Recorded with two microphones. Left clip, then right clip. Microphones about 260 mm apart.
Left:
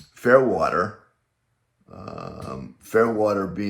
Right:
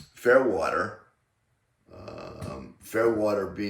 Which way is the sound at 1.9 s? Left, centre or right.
Centre.